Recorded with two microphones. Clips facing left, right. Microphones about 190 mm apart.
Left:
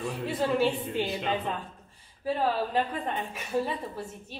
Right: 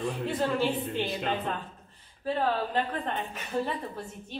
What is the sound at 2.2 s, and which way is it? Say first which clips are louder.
Speech: left 1 dB; 10° left (ahead or behind).